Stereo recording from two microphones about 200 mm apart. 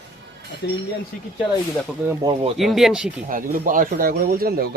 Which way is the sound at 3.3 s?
45° right (ahead or behind).